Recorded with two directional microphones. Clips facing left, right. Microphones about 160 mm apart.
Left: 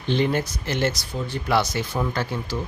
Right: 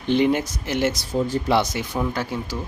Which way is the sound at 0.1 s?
15° right (ahead or behind).